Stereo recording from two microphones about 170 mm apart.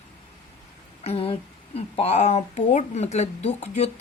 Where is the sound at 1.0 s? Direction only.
35° left (ahead or behind).